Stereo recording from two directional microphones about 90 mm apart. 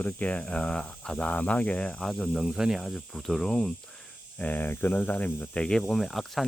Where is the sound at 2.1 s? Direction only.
Centre (ahead or behind).